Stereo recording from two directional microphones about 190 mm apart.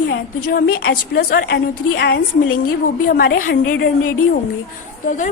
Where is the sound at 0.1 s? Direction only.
50° left (ahead or behind).